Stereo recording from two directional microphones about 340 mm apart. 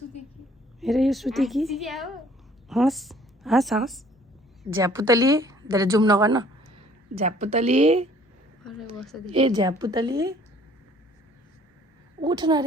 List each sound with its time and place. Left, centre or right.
0.8 s a woman's voice: centre
8.6 s a woman's voice: centre
9.3 s a woman's voice: centre
12.2 s a woman's voice: centre